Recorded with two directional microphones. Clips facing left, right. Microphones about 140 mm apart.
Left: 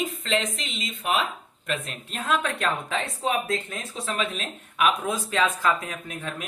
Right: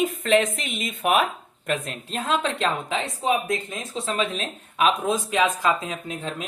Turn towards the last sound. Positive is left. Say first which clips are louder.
# right 3 dB
turn(degrees=-25)  # may be behind; listen again after turning